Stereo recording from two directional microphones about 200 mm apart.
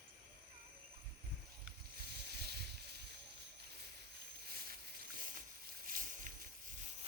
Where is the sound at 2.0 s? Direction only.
55° right (ahead or behind).